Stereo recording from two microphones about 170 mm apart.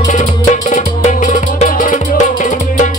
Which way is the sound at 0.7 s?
50° left (ahead or behind).